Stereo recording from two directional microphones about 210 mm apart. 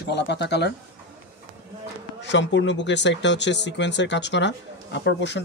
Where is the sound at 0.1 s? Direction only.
55° left (ahead or behind).